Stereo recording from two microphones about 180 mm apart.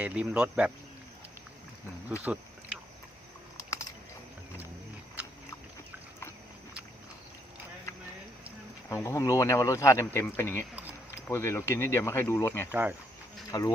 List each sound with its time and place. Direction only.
0.0 s speech: 5° right (ahead or behind)
2.2 s a sound: 5° right (ahead or behind)
3.6 s typing: 15° left (ahead or behind)
8.9 s speech: 15° left (ahead or behind)
12.7 s speech: 10° right (ahead or behind)
13.5 s speech: 20° left (ahead or behind)